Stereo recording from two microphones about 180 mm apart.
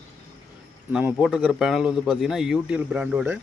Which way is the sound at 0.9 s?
10° right (ahead or behind).